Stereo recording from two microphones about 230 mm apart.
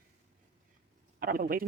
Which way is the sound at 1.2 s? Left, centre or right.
Right.